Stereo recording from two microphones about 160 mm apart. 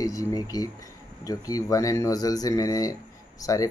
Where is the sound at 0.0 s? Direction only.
20° left (ahead or behind).